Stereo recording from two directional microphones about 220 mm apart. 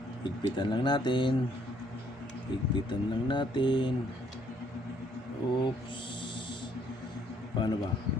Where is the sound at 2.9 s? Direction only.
20° left (ahead or behind).